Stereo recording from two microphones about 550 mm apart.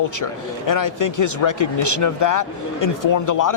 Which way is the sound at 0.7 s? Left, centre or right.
Left.